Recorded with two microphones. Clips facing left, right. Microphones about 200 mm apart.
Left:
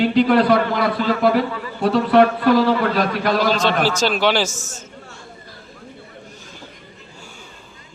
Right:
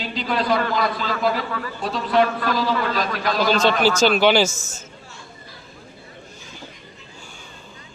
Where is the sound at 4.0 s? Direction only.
Centre (ahead or behind).